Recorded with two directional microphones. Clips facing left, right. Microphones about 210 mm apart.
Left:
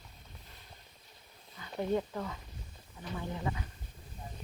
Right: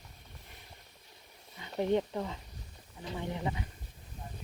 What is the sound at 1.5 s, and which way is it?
Speech, 25° right (ahead or behind).